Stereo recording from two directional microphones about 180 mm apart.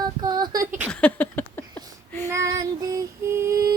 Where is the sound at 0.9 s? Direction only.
10° left (ahead or behind).